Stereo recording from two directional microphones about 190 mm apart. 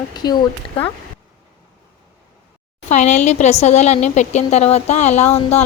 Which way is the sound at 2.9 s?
35° left (ahead or behind).